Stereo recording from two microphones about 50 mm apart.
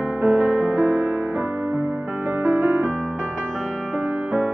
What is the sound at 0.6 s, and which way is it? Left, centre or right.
Music, right.